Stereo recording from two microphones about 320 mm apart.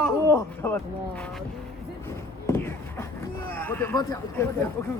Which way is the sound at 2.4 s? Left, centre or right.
Centre.